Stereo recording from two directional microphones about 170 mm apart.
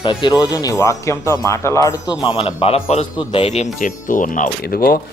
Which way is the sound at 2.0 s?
5° right (ahead or behind).